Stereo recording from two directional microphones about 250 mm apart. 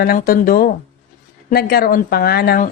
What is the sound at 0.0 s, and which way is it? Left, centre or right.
Speech, left.